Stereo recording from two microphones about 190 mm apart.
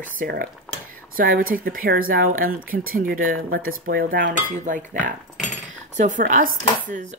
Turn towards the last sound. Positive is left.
turn(degrees=-40)  # may be behind; listen again after turning